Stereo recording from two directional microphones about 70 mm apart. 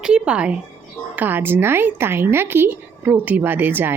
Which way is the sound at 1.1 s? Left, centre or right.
Right.